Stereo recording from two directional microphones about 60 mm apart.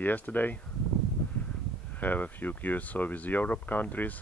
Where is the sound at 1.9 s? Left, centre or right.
Left.